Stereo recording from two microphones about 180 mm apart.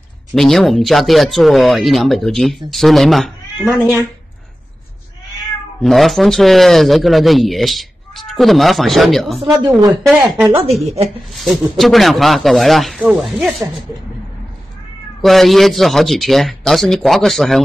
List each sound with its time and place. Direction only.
0.3 s speech: centre (ahead or behind)
5.8 s speech: centre (ahead or behind)
10.6 s speech: 35° right (ahead or behind)
11.3 s speech: centre (ahead or behind)
15.2 s speech: centre (ahead or behind)